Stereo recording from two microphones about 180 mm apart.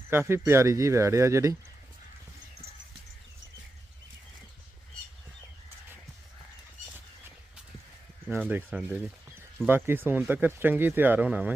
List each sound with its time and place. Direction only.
0.1 s speech: 15° right (ahead or behind)
8.3 s speech: 10° right (ahead or behind)